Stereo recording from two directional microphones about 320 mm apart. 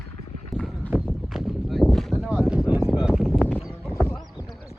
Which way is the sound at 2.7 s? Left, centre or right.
Centre.